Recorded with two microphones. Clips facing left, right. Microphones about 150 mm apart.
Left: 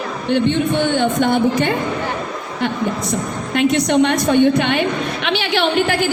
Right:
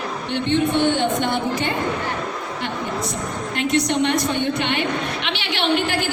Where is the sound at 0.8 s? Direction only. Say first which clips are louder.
Left 3 dB; 50° left (ahead or behind).